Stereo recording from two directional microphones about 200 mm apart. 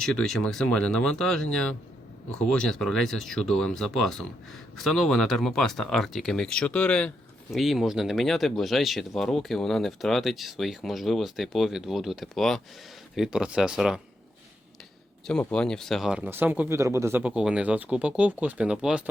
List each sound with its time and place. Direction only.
0.0 s speech: 5° left (ahead or behind)
15.3 s speech: 5° left (ahead or behind)